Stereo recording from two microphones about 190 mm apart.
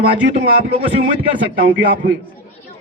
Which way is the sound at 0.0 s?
30° right (ahead or behind).